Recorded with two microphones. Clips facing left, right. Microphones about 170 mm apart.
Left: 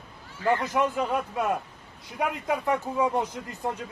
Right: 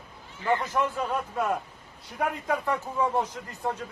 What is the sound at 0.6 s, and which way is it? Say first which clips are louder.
Speech: left 2 dB; 15° left (ahead or behind).